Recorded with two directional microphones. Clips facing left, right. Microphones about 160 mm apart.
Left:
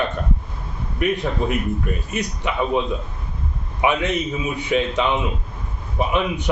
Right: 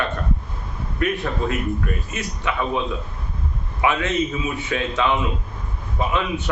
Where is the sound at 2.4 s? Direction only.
20° left (ahead or behind).